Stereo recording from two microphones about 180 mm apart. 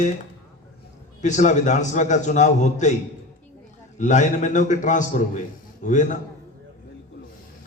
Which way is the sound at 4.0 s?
40° left (ahead or behind).